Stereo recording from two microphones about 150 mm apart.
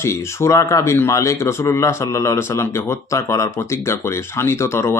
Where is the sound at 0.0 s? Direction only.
20° left (ahead or behind).